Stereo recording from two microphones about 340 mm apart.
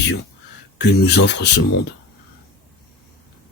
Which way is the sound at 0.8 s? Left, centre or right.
Left.